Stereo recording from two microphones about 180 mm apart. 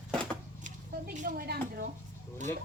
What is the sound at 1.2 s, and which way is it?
Speech, 50° right (ahead or behind).